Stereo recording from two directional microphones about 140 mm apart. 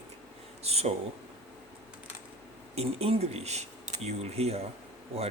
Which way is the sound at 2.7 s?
45° right (ahead or behind).